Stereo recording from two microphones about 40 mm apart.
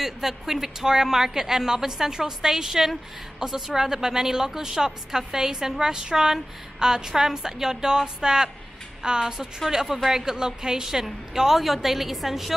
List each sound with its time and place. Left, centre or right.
0.0 s a woman's voice: centre